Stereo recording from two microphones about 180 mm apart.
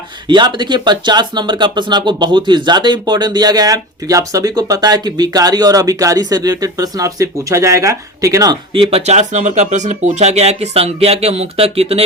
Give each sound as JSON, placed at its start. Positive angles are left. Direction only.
{"t": 0.3, "sound": "speech", "side_deg": -25}
{"t": 8.7, "sound": "speech", "side_deg": -30}